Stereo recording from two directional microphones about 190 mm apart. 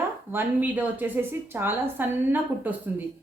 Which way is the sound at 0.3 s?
10° right (ahead or behind).